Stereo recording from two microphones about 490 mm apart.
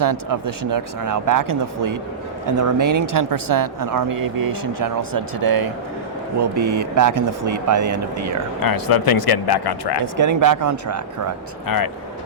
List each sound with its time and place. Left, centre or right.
0.0 s speech: right
8.6 s speech: left
10.0 s speech: right
11.6 s speech: left